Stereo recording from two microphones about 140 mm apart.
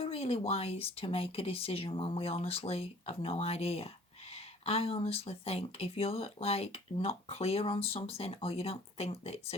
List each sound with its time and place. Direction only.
0.0 s speech: 45° left (ahead or behind)